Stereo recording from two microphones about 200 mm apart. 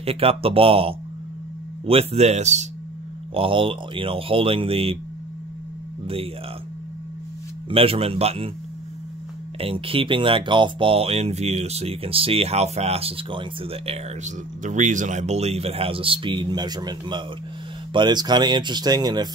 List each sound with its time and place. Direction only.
0.0 s speech: 30° right (ahead or behind)
6.0 s speech: 30° right (ahead or behind)
7.7 s speech: 30° right (ahead or behind)
9.6 s speech: 30° right (ahead or behind)